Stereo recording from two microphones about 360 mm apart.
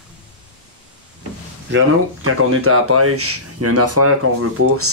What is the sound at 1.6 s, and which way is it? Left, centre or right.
Speech, right.